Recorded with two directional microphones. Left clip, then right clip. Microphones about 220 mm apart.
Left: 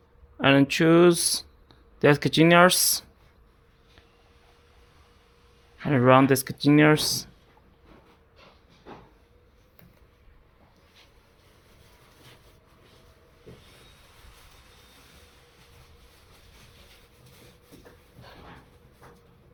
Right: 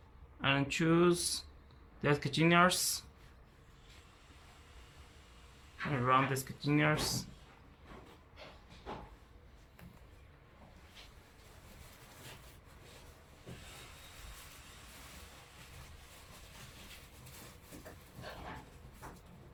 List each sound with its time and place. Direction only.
0.3 s speech: 40° left (ahead or behind)
5.9 s speech: 40° left (ahead or behind)